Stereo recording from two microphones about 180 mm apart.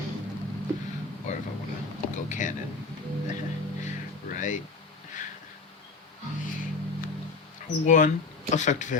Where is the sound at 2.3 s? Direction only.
45° left (ahead or behind).